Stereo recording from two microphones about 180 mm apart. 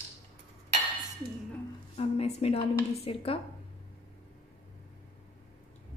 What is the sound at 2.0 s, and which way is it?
A woman's voice, 35° left (ahead or behind).